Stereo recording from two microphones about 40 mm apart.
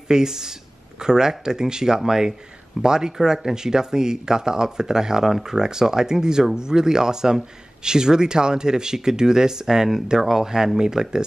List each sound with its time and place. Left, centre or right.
0.1 s speech: centre